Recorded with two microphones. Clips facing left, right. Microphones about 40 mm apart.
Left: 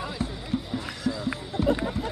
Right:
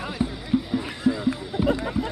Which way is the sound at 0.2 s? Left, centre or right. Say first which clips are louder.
Right 9 dB; centre.